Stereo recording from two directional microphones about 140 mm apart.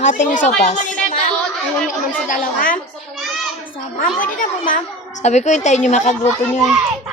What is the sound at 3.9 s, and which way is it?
Speech, 75° left (ahead or behind).